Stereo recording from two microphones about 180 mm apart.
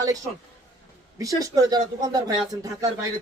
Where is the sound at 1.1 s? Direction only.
20° right (ahead or behind).